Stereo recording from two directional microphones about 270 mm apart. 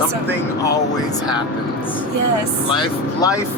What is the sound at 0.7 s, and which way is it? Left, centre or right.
Speech, centre.